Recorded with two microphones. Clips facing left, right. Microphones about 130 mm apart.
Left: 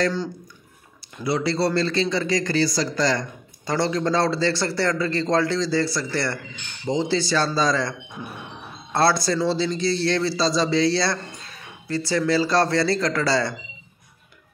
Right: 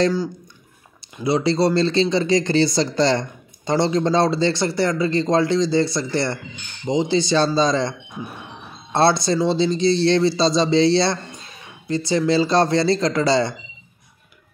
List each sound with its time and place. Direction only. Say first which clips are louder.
1.1 s speech: right 4 dB; 20° right (ahead or behind)
8.9 s speech: right 3 dB; 20° right (ahead or behind)